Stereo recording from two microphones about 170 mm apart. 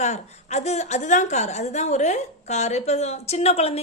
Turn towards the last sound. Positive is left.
turn(degrees=35)  # may be behind; listen again after turning